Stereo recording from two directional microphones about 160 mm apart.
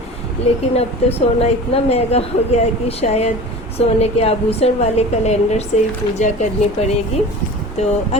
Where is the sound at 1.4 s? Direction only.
40° left (ahead or behind).